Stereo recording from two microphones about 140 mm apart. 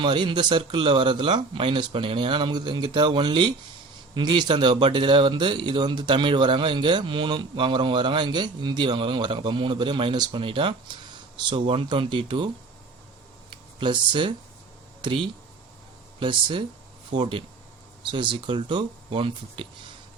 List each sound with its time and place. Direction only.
0.0 s speech: 35° right (ahead or behind)
13.7 s speech: 35° right (ahead or behind)